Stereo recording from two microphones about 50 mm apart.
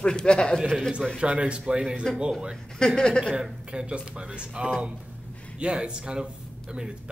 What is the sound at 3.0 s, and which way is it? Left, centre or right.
Speech, centre.